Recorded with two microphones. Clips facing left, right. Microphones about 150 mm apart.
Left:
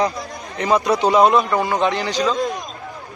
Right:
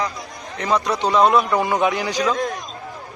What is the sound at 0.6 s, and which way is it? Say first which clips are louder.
A man's voice: left 3 dB; 10° left (ahead or behind).